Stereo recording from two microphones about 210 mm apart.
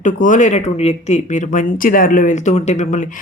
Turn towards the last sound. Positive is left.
turn(degrees=35)  # may be behind; listen again after turning